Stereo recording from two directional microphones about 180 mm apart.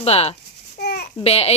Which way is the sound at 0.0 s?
35° left (ahead or behind).